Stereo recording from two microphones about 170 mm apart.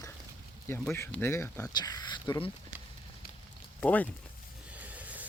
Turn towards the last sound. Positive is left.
turn(degrees=-10)  # may be behind; listen again after turning